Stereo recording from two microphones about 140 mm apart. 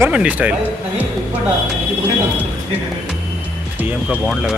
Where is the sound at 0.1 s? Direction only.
10° right (ahead or behind).